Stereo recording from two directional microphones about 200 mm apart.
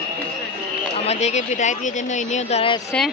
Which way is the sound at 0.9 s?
35° left (ahead or behind).